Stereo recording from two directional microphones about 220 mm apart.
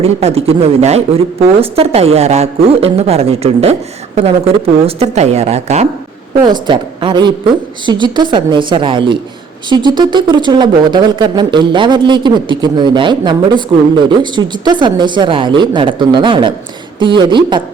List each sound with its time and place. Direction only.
0.0 s a woman's voice: 25° right (ahead or behind)